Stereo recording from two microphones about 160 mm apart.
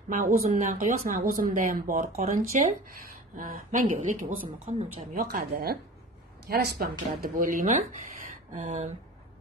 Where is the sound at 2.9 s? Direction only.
65° right (ahead or behind); by 4.8 s 45° right (ahead or behind).